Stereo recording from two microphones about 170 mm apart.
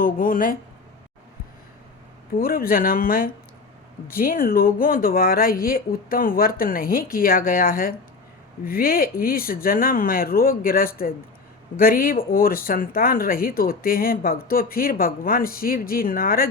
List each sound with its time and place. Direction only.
0.0 s speech: 55° left (ahead or behind)
2.3 s speech: 60° left (ahead or behind)